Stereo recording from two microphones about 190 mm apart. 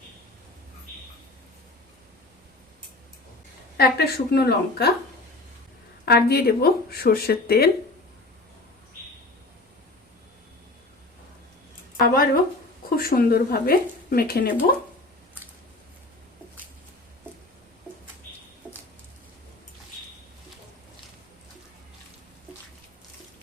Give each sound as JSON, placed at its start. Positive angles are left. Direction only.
{"t": 3.8, "sound": "speech", "side_deg": 55}
{"t": 6.1, "sound": "speech", "side_deg": 55}
{"t": 11.9, "sound": "speech", "side_deg": 50}